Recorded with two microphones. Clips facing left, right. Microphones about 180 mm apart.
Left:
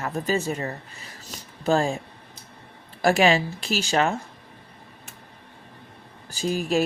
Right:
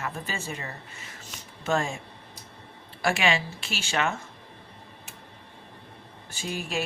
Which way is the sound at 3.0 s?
40° left (ahead or behind).